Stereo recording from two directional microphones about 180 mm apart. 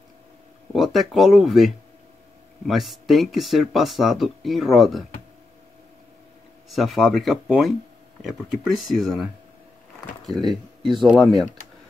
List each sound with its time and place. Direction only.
0.7 s speech: centre (ahead or behind)
6.7 s speech: centre (ahead or behind)